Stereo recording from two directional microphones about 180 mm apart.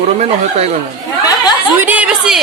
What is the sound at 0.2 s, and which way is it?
Speech, 35° right (ahead or behind).